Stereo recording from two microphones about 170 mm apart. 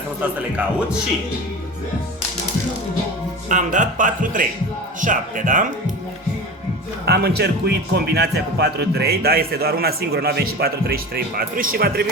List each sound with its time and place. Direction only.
3.5 s speech: 50° right (ahead or behind)
7.0 s speech: 70° right (ahead or behind)